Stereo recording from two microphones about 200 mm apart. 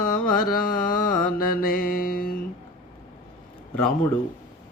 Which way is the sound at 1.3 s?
45° left (ahead or behind).